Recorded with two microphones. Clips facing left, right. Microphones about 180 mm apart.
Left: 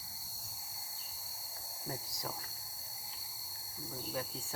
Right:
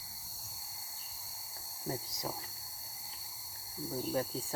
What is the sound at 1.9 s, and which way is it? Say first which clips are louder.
Speech: right 4 dB; 20° right (ahead or behind).